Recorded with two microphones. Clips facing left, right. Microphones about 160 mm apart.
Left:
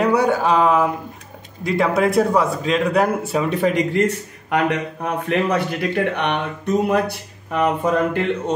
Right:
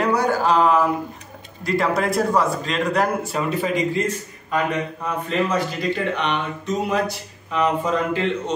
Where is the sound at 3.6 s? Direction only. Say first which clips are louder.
Left 5 dB; 65° left (ahead or behind).